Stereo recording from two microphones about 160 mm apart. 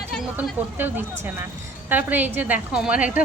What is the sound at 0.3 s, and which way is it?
Speech, 10° right (ahead or behind).